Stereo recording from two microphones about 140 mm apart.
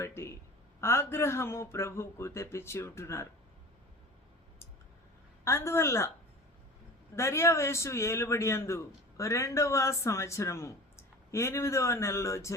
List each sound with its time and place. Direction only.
0.0 s a man's voice: 20° left (ahead or behind)
5.5 s a man's voice: 20° left (ahead or behind)
7.2 s a man's voice: 20° left (ahead or behind)